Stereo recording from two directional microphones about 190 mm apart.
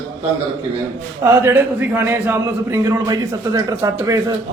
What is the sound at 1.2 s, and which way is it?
A man's voice, 10° right (ahead or behind).